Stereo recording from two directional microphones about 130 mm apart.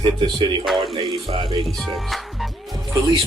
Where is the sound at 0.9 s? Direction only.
45° right (ahead or behind).